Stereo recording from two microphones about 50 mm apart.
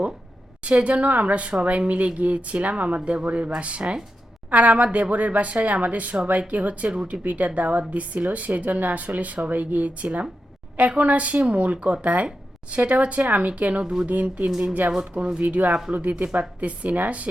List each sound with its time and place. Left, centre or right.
0.6 s a woman's voice: right